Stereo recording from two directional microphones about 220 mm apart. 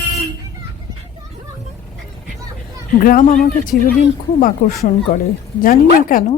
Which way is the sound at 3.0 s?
40° left (ahead or behind).